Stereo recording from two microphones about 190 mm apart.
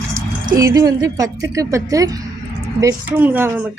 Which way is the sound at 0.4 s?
20° right (ahead or behind).